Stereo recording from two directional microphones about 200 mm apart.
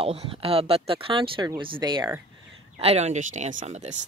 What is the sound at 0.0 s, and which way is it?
Speech, 30° right (ahead or behind).